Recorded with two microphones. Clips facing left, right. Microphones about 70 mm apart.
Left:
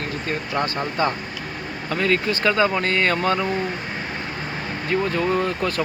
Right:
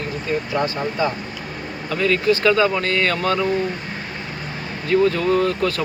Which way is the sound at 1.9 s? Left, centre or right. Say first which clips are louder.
Right 3 dB; left.